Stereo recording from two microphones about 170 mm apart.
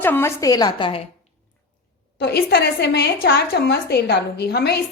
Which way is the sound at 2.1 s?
70° left (ahead or behind).